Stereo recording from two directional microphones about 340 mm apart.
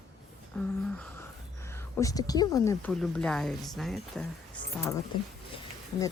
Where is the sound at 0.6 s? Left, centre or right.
Centre.